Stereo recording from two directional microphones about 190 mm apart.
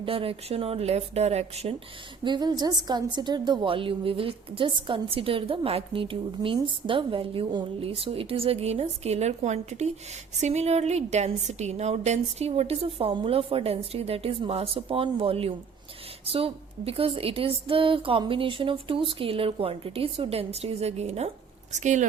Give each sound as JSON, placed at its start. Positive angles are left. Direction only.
{"t": 0.0, "sound": "a woman's voice", "side_deg": -30}